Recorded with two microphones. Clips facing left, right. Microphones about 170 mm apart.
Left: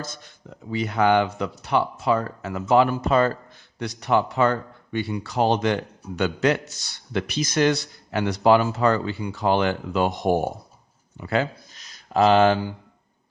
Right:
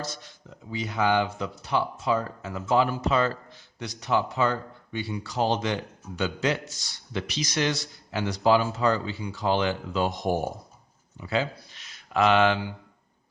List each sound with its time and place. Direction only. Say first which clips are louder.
0.0 s speech: even; 50° left (ahead or behind)
0.7 s speech: left 5 dB; 60° left (ahead or behind)
3.8 s speech: left 4 dB; 60° left (ahead or behind)
11.7 s a sound: left 4 dB; 40° left (ahead or behind)